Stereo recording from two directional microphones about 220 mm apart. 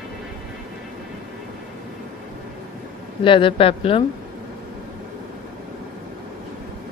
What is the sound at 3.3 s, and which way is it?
Speech, 25° left (ahead or behind).